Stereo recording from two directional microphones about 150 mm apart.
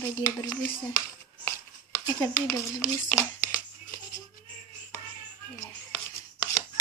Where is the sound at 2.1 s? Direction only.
20° left (ahead or behind).